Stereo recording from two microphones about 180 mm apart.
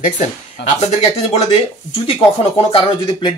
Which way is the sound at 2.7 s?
30° left (ahead or behind).